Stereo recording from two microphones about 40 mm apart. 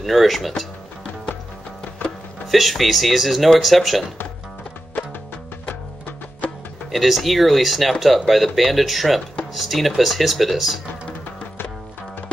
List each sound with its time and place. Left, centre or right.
0.0 s speech: centre
2.4 s speech: centre
5.7 s music: left
6.9 s speech: centre